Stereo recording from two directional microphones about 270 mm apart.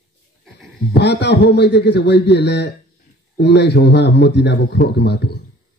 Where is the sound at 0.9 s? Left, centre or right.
Left.